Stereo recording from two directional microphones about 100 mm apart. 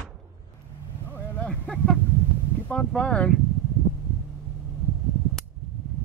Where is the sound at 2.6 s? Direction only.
10° left (ahead or behind).